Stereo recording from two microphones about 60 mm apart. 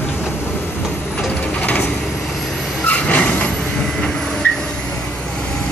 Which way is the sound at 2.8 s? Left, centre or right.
Left.